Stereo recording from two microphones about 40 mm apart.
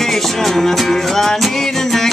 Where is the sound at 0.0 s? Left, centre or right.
Centre.